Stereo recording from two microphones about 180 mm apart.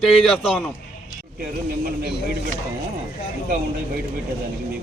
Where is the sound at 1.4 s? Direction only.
55° right (ahead or behind).